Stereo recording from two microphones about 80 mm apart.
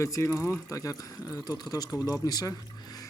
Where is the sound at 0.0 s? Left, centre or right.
Left.